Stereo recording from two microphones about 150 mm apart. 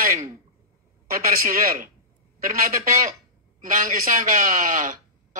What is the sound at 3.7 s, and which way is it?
Speech, 65° right (ahead or behind).